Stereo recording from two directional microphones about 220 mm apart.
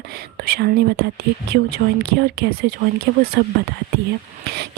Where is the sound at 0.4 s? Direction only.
45° right (ahead or behind).